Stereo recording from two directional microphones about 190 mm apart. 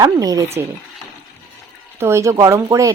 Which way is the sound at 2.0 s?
15° right (ahead or behind).